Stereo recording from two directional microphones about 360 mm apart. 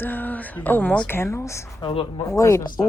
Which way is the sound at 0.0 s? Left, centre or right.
Centre.